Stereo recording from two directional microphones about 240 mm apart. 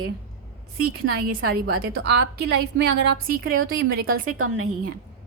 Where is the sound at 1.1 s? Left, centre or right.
Right.